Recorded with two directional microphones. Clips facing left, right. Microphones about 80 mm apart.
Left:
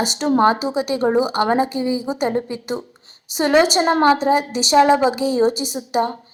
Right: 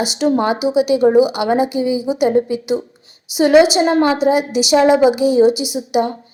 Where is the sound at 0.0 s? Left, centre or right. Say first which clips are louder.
Even; left.